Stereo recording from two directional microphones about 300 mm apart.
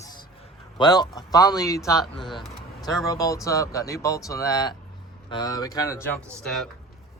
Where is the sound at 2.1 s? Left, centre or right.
Centre.